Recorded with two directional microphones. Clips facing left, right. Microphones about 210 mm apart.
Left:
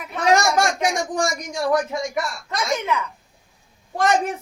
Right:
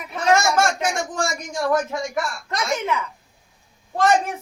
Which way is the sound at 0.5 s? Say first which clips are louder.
Even; 15° left (ahead or behind).